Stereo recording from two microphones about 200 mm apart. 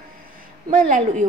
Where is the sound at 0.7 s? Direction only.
40° right (ahead or behind).